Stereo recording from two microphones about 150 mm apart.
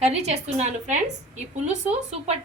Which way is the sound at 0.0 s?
45° right (ahead or behind).